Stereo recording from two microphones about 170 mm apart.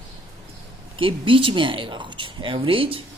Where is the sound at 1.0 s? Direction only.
30° right (ahead or behind).